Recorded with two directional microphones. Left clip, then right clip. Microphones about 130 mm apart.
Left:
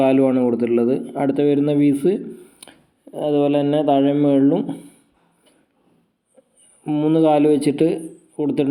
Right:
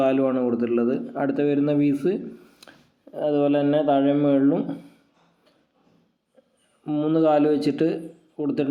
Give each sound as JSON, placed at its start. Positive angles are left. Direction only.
{"t": 0.0, "sound": "speech", "side_deg": 25}
{"t": 6.8, "sound": "speech", "side_deg": 15}